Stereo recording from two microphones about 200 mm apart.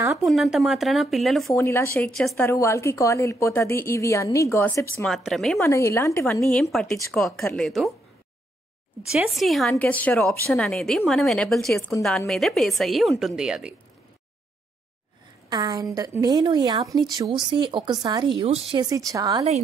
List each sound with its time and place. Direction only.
0.2 s a woman's voice: centre (ahead or behind)
1.6 s a woman's voice: 10° left (ahead or behind)
2.4 s a woman's voice: 15° left (ahead or behind)
4.9 s a woman's voice: centre (ahead or behind)
5.6 s a woman's voice: 15° left (ahead or behind)
6.4 s a woman's voice: centre (ahead or behind)
9.1 s a woman's voice: centre (ahead or behind)
15.5 s a woman's voice: 20° right (ahead or behind)